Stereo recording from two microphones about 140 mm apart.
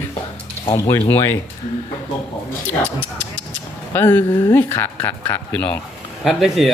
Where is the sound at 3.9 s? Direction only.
15° left (ahead or behind).